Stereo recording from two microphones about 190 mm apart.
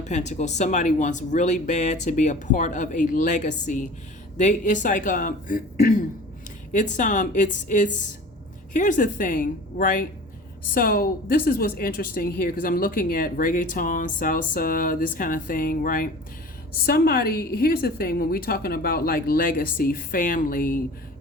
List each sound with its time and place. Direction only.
0.1 s a woman's voice: 40° left (ahead or behind)
6.9 s a woman's voice: 40° left (ahead or behind)